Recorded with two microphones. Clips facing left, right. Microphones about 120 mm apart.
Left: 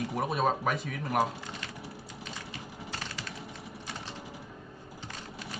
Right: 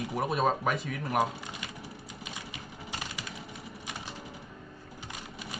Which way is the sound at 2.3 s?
15° right (ahead or behind).